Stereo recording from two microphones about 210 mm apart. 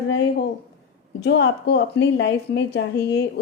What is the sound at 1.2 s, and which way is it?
A woman's voice, 55° left (ahead or behind).